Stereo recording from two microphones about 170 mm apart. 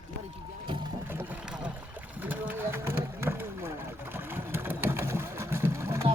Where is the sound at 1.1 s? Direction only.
10° right (ahead or behind).